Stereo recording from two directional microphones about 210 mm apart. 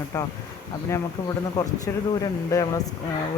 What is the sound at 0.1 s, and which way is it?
Speech, 15° left (ahead or behind).